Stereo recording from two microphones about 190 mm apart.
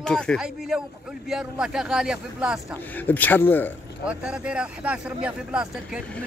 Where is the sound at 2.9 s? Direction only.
10° left (ahead or behind).